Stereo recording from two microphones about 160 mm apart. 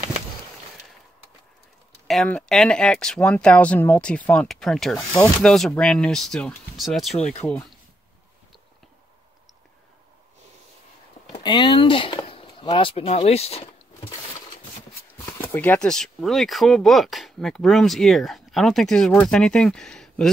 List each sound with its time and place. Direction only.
2.0 s speech: 5° left (ahead or behind)
11.3 s speech: 30° left (ahead or behind)
15.2 s speech: 15° left (ahead or behind)